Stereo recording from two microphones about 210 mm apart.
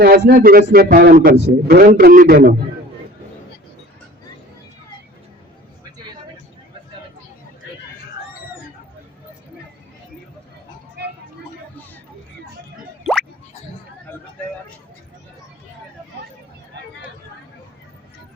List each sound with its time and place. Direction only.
0.0 s speech: 45° right (ahead or behind)
14.1 s vehicle: 10° left (ahead or behind)